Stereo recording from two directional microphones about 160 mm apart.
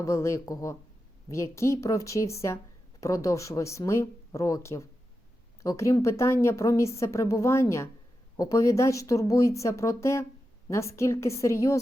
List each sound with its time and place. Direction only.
0.0 s a woman's voice: 20° left (ahead or behind)